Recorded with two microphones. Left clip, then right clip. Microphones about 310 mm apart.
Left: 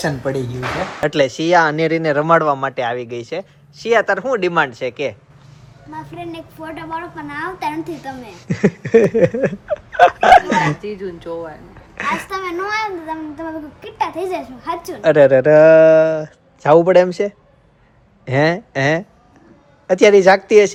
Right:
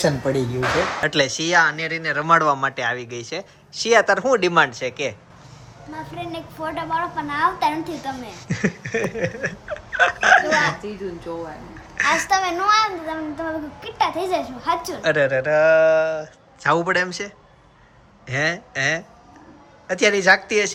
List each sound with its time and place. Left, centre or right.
0.2 s speech: centre
6.1 s a child's voice: centre
11.9 s a child's voice: centre
12.3 s a child's voice: right
15.0 s a child's voice: centre
16.6 s a child's voice: centre